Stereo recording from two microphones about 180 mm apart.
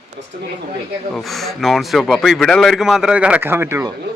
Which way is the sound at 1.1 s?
Centre (ahead or behind).